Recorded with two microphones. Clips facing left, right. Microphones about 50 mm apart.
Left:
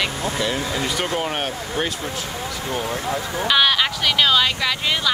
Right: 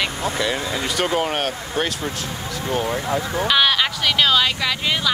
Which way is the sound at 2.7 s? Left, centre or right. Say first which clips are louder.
Right 3 dB; centre.